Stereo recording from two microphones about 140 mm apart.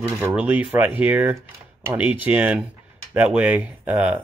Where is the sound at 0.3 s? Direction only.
10° right (ahead or behind).